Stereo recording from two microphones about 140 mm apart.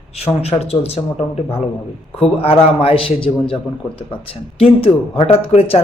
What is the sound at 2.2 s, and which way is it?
A man's voice, 45° left (ahead or behind).